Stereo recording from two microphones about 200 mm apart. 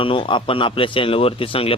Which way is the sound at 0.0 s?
25° left (ahead or behind).